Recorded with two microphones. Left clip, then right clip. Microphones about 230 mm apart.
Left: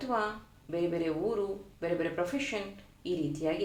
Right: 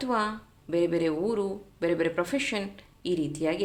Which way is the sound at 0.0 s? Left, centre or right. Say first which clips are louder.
Right 4 dB; right.